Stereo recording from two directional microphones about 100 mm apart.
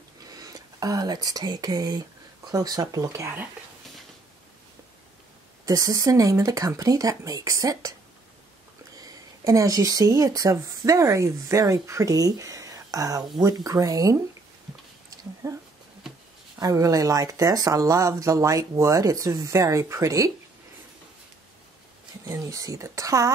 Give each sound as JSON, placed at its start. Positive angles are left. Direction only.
{"t": 0.3, "sound": "speech", "side_deg": -40}
{"t": 5.7, "sound": "speech", "side_deg": -35}
{"t": 8.9, "sound": "speech", "side_deg": -35}
{"t": 15.4, "sound": "a sound", "side_deg": -30}
{"t": 16.5, "sound": "speech", "side_deg": -35}
{"t": 22.2, "sound": "speech", "side_deg": -35}